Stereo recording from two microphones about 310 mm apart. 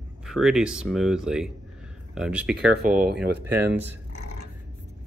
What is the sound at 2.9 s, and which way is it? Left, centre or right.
Speech, right.